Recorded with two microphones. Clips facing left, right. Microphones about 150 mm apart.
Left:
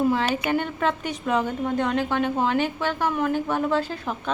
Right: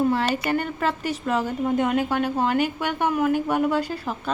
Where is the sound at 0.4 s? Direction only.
Centre (ahead or behind).